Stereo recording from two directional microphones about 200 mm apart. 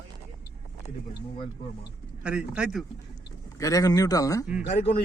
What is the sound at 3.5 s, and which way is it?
Speech, 15° left (ahead or behind).